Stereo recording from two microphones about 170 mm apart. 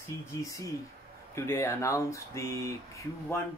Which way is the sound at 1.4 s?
15° left (ahead or behind).